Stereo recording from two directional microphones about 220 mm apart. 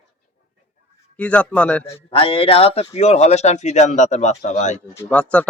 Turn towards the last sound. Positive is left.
turn(degrees=5)  # may be behind; listen again after turning